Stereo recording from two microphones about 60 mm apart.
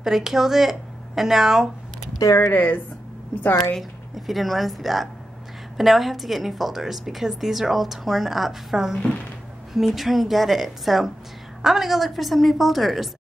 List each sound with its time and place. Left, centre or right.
0.0 s a woman's voice: centre
2.2 s speech: left
2.5 s speech: left
3.7 s a woman's voice: centre